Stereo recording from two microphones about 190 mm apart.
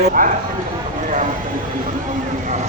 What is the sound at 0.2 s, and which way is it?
Speech, 45° right (ahead or behind).